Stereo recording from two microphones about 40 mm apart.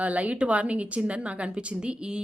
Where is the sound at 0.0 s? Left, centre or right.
Right.